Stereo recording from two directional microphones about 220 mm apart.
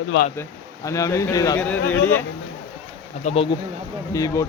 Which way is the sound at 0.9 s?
15° left (ahead or behind).